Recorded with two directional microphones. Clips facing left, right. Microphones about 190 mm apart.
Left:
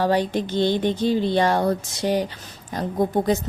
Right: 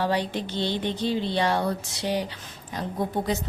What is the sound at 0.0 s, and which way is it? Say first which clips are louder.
A woman's voice: left 5 dB; 45° left (ahead or behind).